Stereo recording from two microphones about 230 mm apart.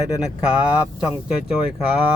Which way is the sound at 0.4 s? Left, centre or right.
Centre.